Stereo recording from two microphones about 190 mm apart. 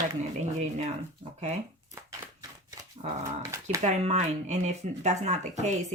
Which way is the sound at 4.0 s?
35° right (ahead or behind).